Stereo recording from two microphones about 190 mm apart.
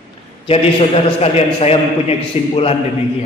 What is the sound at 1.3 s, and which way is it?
A man's voice, 35° left (ahead or behind).